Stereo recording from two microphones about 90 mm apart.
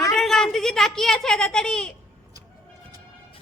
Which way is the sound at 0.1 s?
5° left (ahead or behind).